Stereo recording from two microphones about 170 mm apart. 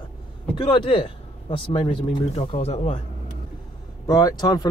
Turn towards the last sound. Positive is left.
turn(degrees=25)  # may be behind; listen again after turning